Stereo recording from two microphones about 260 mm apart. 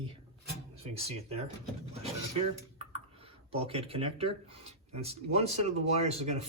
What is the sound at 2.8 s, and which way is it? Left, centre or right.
Computer keyboard, right.